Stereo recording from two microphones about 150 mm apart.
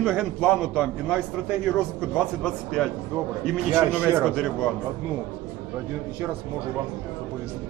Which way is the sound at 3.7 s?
10° right (ahead or behind).